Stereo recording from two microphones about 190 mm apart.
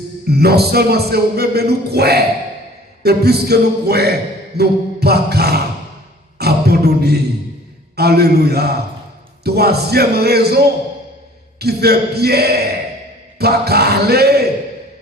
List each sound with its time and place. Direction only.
0.3 s music: 55° right (ahead or behind)
6.4 s vocal music: 55° right (ahead or behind)
7.9 s music: 55° right (ahead or behind)